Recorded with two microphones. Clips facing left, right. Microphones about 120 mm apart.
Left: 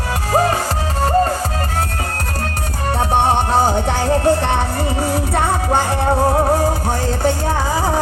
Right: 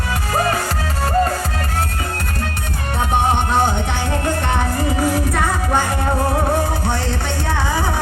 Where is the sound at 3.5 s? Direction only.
35° left (ahead or behind).